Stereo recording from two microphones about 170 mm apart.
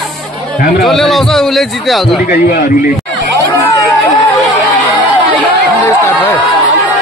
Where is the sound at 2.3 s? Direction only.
60° left (ahead or behind).